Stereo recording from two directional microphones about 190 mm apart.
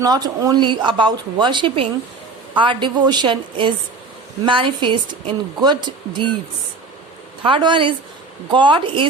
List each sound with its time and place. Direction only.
0.0 s speech: 20° right (ahead or behind)
7.4 s speech: 25° right (ahead or behind)